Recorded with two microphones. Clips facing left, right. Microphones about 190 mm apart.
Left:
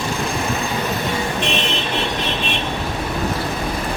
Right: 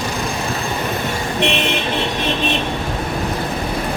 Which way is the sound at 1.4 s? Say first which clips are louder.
Right 8 dB; 60° right (ahead or behind).